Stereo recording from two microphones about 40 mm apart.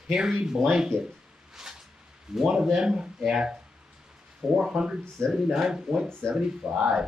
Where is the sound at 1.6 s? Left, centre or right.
Centre.